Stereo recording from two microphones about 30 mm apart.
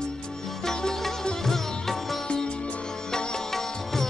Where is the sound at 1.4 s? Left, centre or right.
Centre.